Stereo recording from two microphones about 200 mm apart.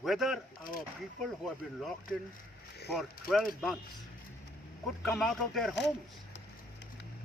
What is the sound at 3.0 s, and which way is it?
Speech, centre (ahead or behind).